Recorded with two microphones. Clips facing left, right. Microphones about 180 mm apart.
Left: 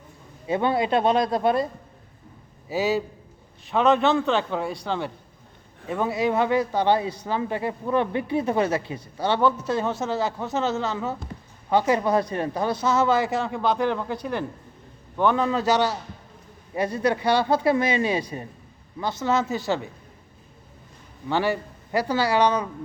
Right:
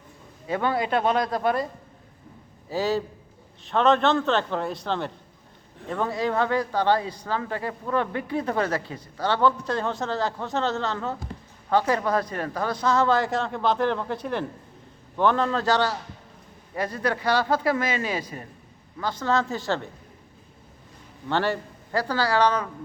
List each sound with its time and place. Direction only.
0.4 s speech: 20° left (ahead or behind)
3.7 s a man's voice: 5° left (ahead or behind)
11.7 s a man's voice: 15° left (ahead or behind)
16.7 s a man's voice: 20° left (ahead or behind)
21.2 s a man's voice: 10° left (ahead or behind)